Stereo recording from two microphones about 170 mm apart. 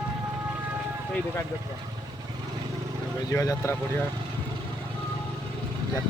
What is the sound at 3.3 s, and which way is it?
Speech, 20° left (ahead or behind).